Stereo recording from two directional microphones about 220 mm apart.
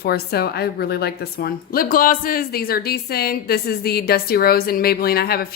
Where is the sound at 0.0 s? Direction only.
45° left (ahead or behind).